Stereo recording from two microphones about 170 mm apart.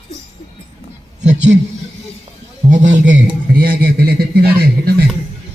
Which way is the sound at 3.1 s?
60° right (ahead or behind).